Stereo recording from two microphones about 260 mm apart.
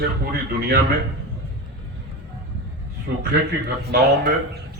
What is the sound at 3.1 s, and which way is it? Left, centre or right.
A man's voice, right.